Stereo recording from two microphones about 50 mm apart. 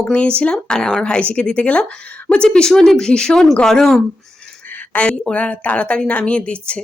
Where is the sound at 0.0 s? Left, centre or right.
Left.